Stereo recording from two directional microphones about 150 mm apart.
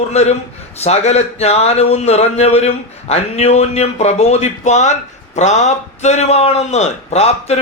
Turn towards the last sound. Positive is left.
turn(degrees=45)  # may be behind; listen again after turning